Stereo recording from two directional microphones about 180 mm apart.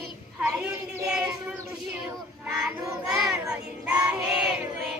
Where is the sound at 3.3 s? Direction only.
5° right (ahead or behind).